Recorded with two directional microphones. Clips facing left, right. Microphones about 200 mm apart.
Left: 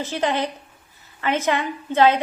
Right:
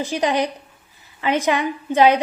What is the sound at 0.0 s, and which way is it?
A woman's voice, 15° right (ahead or behind).